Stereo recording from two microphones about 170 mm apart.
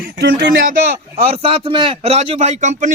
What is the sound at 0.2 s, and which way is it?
Speech, 65° right (ahead or behind).